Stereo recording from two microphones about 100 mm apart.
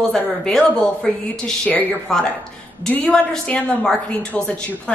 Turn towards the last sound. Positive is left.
turn(degrees=10)  # may be behind; listen again after turning